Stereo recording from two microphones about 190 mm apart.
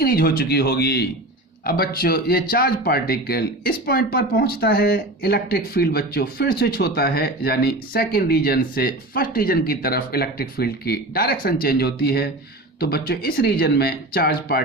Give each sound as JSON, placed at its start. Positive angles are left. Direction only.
{"t": 0.0, "sound": "speech", "side_deg": 50}